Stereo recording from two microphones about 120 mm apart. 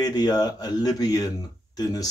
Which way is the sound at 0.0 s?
35° left (ahead or behind).